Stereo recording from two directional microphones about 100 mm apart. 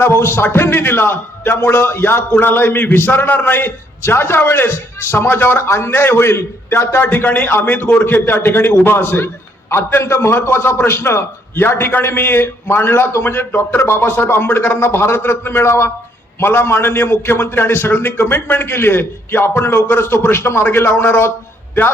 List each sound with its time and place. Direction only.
0.0 s a man's voice: 25° left (ahead or behind)